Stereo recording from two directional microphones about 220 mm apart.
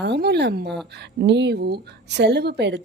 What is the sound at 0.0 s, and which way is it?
Speech, 50° right (ahead or behind).